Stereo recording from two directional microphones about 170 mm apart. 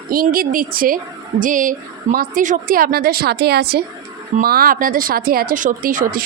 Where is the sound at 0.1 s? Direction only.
60° right (ahead or behind).